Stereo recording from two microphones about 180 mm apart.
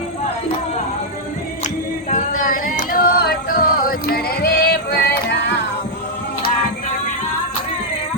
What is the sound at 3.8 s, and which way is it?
Music, 55° left (ahead or behind).